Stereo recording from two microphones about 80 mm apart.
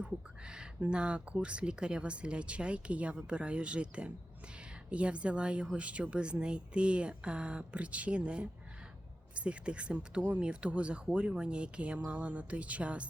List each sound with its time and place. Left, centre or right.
0.0 s speech: centre